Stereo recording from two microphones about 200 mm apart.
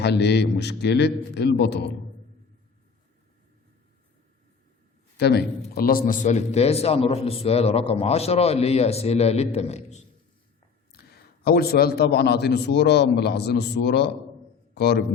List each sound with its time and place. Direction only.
0.0 s a man's voice: 60° left (ahead or behind)
5.1 s a man's voice: 55° left (ahead or behind); by 10.0 s 35° left (ahead or behind)
11.4 s a man's voice: 50° left (ahead or behind)